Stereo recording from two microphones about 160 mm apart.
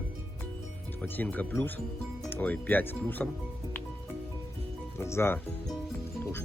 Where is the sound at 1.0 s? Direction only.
10° left (ahead or behind).